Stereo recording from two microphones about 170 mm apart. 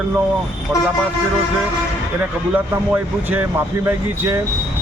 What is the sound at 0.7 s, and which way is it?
Speech, 10° right (ahead or behind).